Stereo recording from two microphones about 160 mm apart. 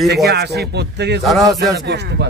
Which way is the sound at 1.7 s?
90° right.